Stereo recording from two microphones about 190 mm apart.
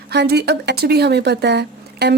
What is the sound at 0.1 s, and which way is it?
Speech, 60° right (ahead or behind).